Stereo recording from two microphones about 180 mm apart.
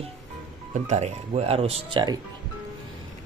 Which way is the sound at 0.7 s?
40° right (ahead or behind).